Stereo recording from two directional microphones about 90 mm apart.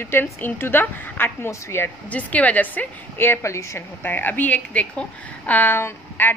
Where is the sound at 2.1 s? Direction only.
15° left (ahead or behind); by 3.8 s 35° left (ahead or behind).